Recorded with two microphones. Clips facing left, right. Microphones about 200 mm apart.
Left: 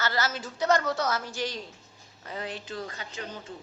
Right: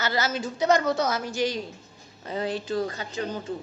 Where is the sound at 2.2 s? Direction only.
30° right (ahead or behind).